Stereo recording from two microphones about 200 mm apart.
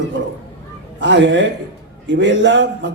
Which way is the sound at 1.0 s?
65° right (ahead or behind).